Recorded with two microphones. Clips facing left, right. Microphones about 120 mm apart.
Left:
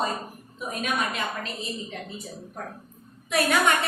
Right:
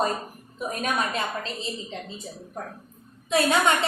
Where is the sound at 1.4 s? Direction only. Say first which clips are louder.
Right 1 dB; 25° right (ahead or behind).